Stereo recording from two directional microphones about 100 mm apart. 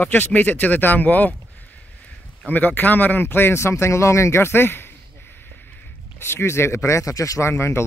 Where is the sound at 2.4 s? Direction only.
20° left (ahead or behind).